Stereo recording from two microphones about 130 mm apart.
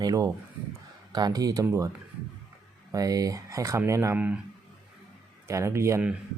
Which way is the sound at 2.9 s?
25° right (ahead or behind).